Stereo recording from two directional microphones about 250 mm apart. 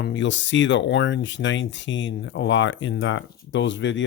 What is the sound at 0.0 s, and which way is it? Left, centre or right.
Speech, left.